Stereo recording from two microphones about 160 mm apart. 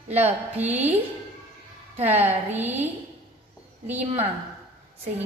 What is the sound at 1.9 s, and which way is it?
Speech, 40° right (ahead or behind).